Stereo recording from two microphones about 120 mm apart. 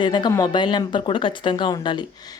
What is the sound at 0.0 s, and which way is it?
Speech, 40° left (ahead or behind).